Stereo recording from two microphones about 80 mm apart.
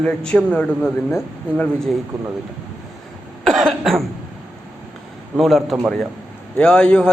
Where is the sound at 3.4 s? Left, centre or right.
Centre.